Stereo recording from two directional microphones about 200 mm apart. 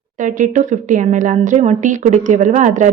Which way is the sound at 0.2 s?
40° right (ahead or behind).